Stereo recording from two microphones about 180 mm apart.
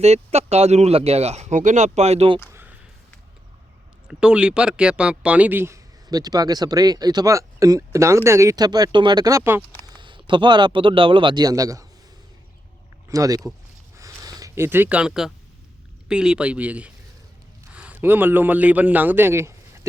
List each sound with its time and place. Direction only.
0.0 s speech: 35° right (ahead or behind)
2.5 s a sound: 10° right (ahead or behind)
4.1 s speech: 5° right (ahead or behind)
9.9 s a man's voice: 25° right (ahead or behind)
13.1 s speech: 20° right (ahead or behind)
13.9 s a sound: 15° right (ahead or behind)
16.0 s a man's voice: 5° right (ahead or behind)